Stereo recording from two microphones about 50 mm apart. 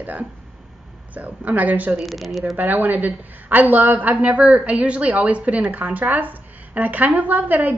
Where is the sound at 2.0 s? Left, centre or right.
Centre.